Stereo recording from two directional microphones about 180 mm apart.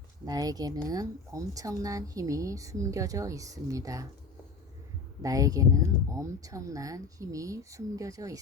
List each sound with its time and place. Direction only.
0.3 s speech: 20° right (ahead or behind)
5.2 s speech: 20° right (ahead or behind)